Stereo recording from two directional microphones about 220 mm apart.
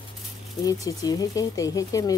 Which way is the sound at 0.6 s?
15° left (ahead or behind).